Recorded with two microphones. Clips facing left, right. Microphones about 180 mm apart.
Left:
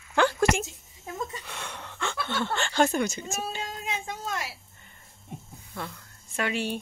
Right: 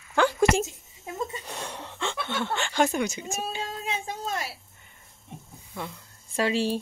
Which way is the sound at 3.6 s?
30° right (ahead or behind).